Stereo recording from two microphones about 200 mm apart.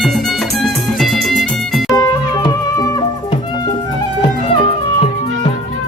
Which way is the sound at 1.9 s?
20° left (ahead or behind).